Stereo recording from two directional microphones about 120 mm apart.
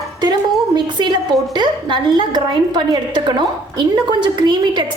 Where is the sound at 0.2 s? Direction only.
35° right (ahead or behind).